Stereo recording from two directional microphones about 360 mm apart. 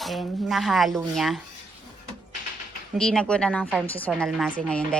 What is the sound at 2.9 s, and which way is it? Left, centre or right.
A woman's voice, centre.